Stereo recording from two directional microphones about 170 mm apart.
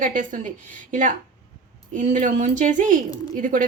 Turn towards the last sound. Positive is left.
turn(degrees=-50)  # may be behind; listen again after turning